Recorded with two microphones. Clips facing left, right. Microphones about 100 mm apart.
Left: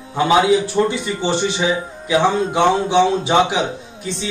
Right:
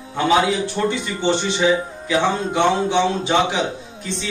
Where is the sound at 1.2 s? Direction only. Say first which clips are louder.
Right 1 dB; 15° left (ahead or behind).